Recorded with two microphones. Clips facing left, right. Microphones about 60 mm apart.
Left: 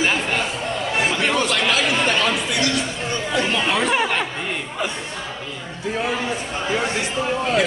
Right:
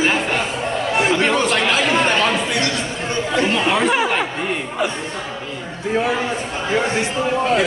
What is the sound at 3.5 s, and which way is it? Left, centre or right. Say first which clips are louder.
Speech: right 2 dB; centre.